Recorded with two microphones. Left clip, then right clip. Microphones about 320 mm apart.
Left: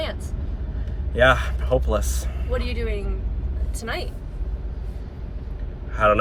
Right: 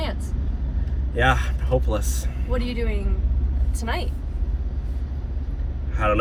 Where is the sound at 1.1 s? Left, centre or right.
Centre.